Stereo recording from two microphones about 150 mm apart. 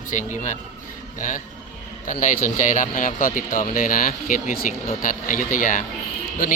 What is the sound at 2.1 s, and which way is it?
Speech, 60° left (ahead or behind).